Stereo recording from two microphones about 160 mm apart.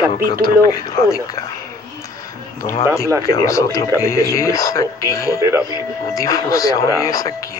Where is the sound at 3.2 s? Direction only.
20° left (ahead or behind).